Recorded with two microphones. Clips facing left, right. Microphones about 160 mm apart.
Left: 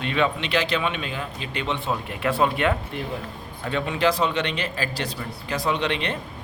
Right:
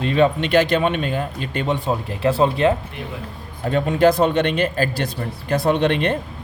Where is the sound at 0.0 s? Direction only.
40° right (ahead or behind).